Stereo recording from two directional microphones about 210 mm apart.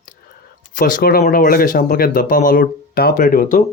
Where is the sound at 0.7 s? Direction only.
40° left (ahead or behind).